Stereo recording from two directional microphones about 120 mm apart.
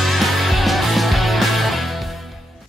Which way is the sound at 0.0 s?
Centre (ahead or behind).